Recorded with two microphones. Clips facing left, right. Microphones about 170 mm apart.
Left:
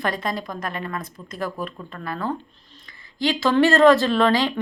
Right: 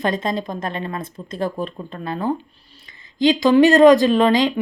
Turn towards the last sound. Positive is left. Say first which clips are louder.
# right 3 dB
turn(degrees=-15)  # may be behind; listen again after turning